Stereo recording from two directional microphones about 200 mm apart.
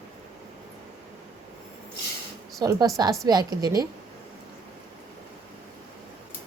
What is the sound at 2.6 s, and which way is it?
A woman's voice, 20° right (ahead or behind).